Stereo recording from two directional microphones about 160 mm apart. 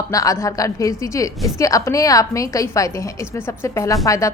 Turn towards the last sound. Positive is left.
turn(degrees=20)  # may be behind; listen again after turning